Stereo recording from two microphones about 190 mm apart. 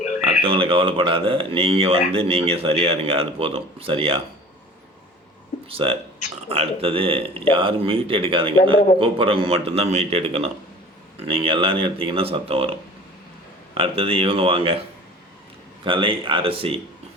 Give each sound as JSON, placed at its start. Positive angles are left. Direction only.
{"t": 0.3, "sound": "speech", "side_deg": -30}
{"t": 5.6, "sound": "speech", "side_deg": -30}
{"t": 13.7, "sound": "speech", "side_deg": -30}